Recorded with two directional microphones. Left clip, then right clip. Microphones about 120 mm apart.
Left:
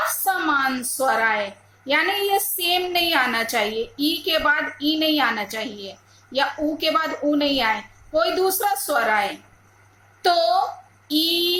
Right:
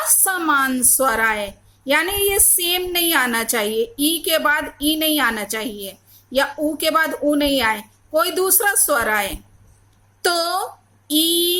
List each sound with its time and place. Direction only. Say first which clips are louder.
0.3 s a woman's voice: right 3 dB; 50° right (ahead or behind)
10.2 s a woman's voice: left 2 dB; 50° right (ahead or behind)